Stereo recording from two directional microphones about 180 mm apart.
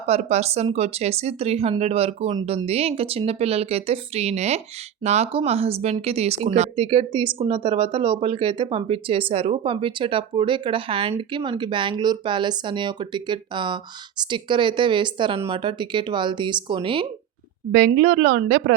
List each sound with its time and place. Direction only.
0.1 s a woman's voice: 35° right (ahead or behind)
17.7 s a woman's voice: 55° right (ahead or behind)